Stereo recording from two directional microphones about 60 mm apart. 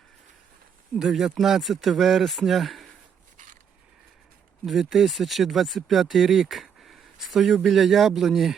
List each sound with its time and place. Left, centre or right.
0.9 s speech: centre
4.6 s speech: centre